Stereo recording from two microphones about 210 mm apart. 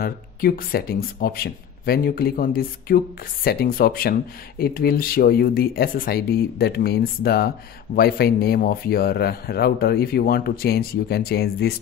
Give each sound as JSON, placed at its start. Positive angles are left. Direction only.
{"t": 0.0, "sound": "speech", "side_deg": 45}